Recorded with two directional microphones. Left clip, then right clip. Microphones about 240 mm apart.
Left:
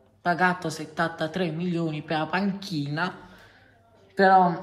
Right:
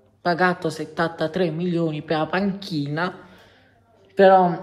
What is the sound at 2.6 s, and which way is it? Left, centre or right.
Speech, right.